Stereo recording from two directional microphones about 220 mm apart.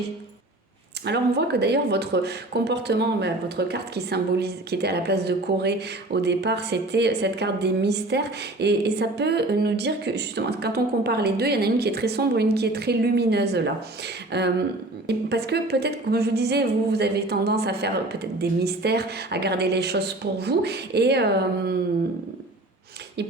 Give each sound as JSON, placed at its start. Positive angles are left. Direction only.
{"t": 1.0, "sound": "a woman's voice", "side_deg": -50}